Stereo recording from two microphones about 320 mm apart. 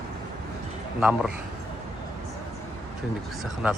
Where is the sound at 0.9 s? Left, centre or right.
Centre.